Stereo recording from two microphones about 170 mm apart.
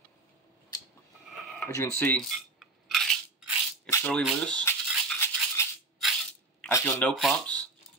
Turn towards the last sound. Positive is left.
turn(degrees=5)  # may be behind; listen again after turning